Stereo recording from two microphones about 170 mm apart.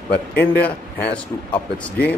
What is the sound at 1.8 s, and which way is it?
Speech, 10° left (ahead or behind).